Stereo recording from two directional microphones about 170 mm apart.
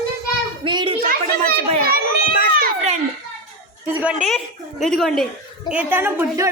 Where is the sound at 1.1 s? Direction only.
60° right (ahead or behind).